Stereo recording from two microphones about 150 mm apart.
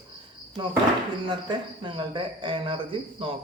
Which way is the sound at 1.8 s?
35° right (ahead or behind).